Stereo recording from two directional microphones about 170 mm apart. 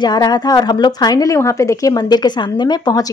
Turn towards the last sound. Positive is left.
turn(degrees=25)  # may be behind; listen again after turning